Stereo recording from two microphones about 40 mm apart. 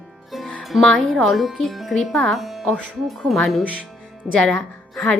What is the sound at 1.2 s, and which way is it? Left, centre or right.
Speech, centre.